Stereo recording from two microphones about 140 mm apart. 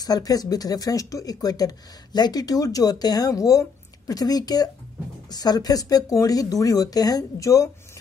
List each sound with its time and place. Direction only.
0.0 s speech: 25° left (ahead or behind)